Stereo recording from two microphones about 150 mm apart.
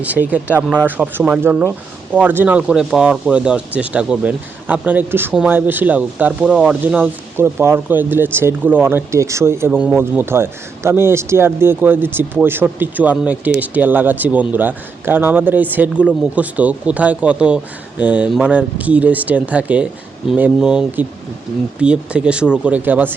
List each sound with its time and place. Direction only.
0.0 s speech: 10° right (ahead or behind)